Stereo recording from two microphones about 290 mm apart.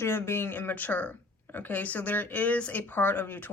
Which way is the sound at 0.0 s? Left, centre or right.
Centre.